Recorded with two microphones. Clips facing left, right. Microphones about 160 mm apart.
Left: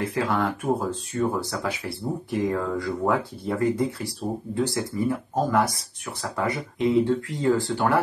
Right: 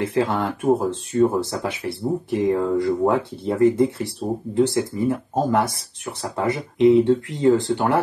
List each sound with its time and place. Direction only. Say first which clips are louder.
0.0 s speech: right 3 dB; 25° right (ahead or behind)